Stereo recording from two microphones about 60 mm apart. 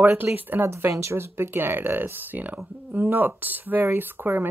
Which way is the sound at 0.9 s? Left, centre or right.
Right.